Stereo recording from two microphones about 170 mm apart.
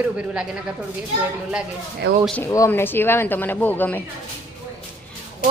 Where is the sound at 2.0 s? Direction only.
90° right.